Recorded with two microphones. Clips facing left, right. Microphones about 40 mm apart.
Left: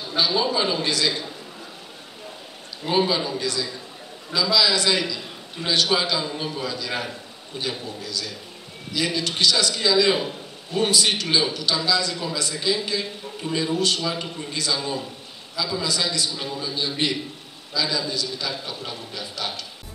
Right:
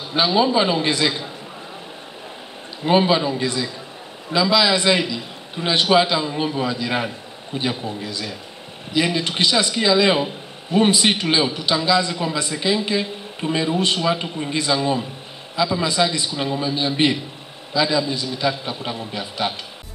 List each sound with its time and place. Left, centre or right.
0.1 s a man's voice: right
2.8 s a man's voice: right